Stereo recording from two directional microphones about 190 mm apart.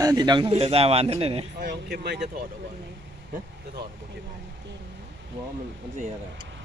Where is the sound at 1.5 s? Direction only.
60° right (ahead or behind).